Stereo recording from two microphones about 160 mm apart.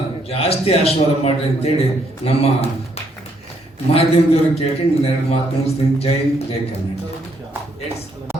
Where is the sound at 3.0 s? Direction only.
40° left (ahead or behind).